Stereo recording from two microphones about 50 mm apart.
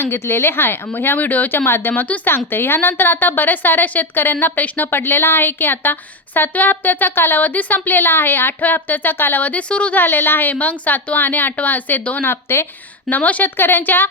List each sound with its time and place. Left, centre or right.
0.0 s speech: left
2.3 s a woman's voice: left
9.4 s speech: left
9.9 s speech: left
10.5 s a woman's voice: left
12.2 s speech: left
13.1 s a woman's voice: left
13.6 s speech: left